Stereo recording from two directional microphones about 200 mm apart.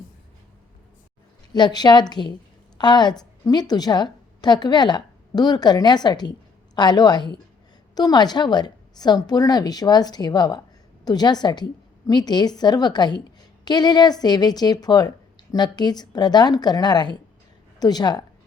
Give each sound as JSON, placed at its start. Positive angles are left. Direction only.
{"t": 1.5, "sound": "a woman's voice", "side_deg": 20}